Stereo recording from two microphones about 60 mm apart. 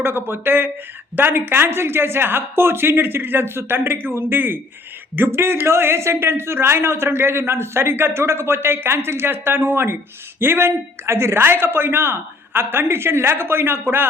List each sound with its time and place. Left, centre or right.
0.0 s a man's voice: right